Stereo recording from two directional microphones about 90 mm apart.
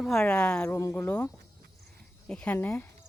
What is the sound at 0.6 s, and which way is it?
Speech, 30° left (ahead or behind).